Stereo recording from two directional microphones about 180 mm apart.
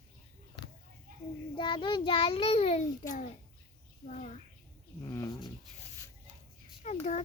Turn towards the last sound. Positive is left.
turn(degrees=40)  # may be behind; listen again after turning